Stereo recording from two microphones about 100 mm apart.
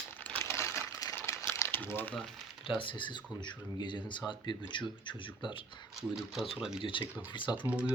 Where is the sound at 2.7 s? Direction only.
55° left (ahead or behind).